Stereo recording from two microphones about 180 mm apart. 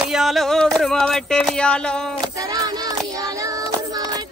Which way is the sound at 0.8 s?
5° left (ahead or behind).